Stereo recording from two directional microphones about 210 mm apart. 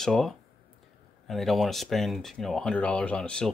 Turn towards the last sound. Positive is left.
turn(degrees=5)  # may be behind; listen again after turning